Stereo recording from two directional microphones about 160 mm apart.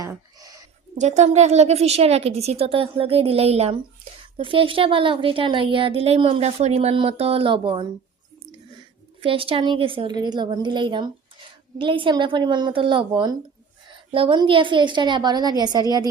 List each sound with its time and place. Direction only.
0.0 s a sound: 20° right (ahead or behind)
0.9 s a woman's voice: 45° right (ahead or behind); by 7.9 s 30° right (ahead or behind)
9.2 s a woman's voice: 35° right (ahead or behind)